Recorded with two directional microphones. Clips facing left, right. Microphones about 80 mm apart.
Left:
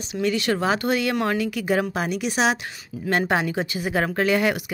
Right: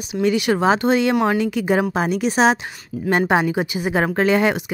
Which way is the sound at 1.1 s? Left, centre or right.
Centre.